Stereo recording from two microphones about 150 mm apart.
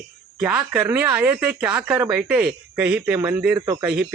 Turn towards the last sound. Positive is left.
turn(degrees=-10)  # may be behind; listen again after turning